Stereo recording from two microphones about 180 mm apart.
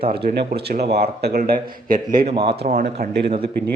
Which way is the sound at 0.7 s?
65° right (ahead or behind).